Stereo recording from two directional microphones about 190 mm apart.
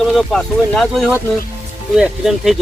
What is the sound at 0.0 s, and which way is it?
Speech, centre (ahead or behind).